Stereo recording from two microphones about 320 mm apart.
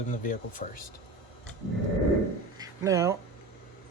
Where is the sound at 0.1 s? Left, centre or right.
Left.